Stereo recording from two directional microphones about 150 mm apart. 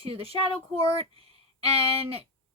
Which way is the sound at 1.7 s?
40° right (ahead or behind).